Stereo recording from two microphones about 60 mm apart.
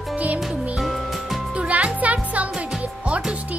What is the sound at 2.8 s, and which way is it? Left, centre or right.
Music, right.